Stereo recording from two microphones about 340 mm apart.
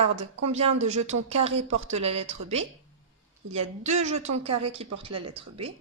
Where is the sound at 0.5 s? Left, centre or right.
Centre.